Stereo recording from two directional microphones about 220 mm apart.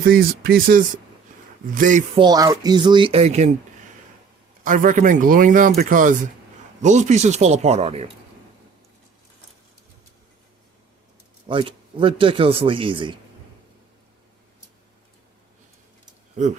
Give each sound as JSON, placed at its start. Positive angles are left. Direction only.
{"t": 0.0, "sound": "speech", "side_deg": -40}
{"t": 2.1, "sound": "a man's voice", "side_deg": -20}
{"t": 4.6, "sound": "speech", "side_deg": -35}
{"t": 11.4, "sound": "a man's voice", "side_deg": -25}